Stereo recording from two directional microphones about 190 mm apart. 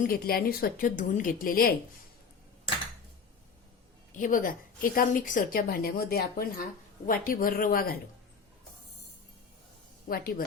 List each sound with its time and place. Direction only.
0.0 s a woman's voice: 50° left (ahead or behind)
4.2 s a woman's voice: 45° left (ahead or behind)
10.1 s a woman's voice: 50° left (ahead or behind)